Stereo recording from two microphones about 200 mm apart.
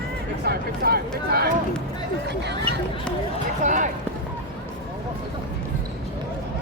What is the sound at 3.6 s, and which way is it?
Speech, 40° right (ahead or behind).